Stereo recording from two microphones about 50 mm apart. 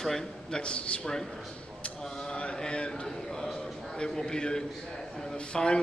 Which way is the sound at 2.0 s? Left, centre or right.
Centre.